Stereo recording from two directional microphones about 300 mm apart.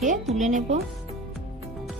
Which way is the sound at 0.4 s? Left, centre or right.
Right.